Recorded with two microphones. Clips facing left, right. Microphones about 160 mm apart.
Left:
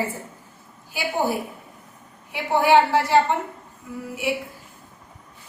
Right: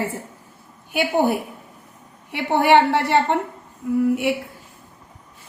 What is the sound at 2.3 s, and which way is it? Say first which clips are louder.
Speech: right 2 dB; 65° right (ahead or behind).